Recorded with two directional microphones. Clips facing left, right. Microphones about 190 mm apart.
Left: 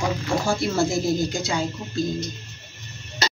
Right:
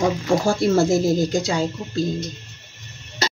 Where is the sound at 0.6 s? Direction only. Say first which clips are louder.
Right 5 dB; 45° right (ahead or behind).